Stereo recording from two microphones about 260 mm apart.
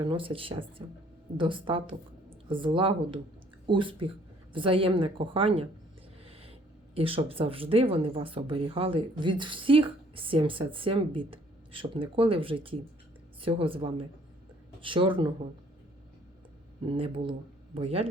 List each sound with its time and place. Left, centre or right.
0.0 s speech: centre
16.8 s speech: centre